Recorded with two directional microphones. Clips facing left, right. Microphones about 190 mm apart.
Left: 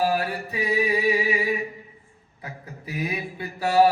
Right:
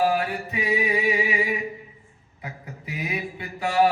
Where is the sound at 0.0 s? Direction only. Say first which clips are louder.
Right 1 dB; 20° right (ahead or behind).